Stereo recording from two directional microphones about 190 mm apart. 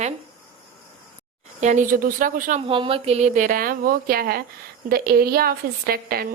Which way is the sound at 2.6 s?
30° right (ahead or behind).